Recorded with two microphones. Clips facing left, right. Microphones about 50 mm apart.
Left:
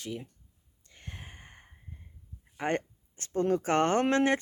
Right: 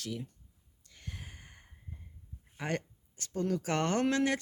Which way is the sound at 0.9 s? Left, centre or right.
Left.